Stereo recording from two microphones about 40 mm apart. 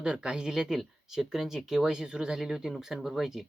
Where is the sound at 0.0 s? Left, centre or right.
Right.